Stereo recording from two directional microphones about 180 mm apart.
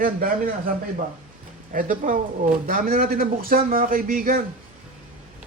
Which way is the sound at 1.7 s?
50° right (ahead or behind).